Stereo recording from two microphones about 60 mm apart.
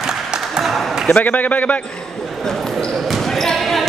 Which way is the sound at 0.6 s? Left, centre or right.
Centre.